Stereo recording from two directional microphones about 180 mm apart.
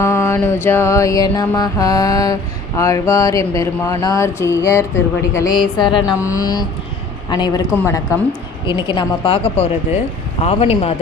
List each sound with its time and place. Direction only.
0.0 s mantra: 15° left (ahead or behind)
6.2 s speech: 20° left (ahead or behind)
7.7 s mantra: 15° left (ahead or behind)
8.9 s a man's voice: 25° left (ahead or behind)